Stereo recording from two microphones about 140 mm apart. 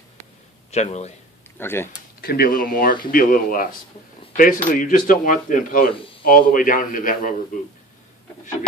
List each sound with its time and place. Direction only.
0.7 s speech: 50° left (ahead or behind)
1.5 s speech: 15° left (ahead or behind)
2.2 s speech: 90° left
5.9 s a sound: 40° left (ahead or behind)
6.2 s speech: 80° left